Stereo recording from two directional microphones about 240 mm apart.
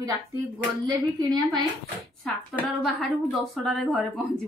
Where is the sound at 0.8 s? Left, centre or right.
Centre.